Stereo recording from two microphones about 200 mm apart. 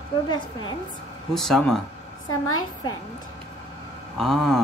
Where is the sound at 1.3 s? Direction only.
Centre (ahead or behind).